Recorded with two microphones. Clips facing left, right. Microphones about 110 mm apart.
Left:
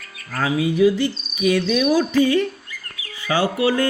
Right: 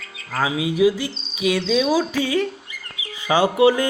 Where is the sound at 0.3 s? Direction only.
10° right (ahead or behind).